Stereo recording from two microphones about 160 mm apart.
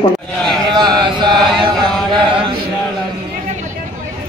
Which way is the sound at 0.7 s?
25° right (ahead or behind).